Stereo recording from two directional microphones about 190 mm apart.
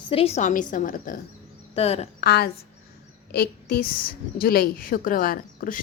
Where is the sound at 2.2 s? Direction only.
55° left (ahead or behind).